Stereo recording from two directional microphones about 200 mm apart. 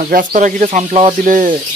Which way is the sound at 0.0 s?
45° right (ahead or behind).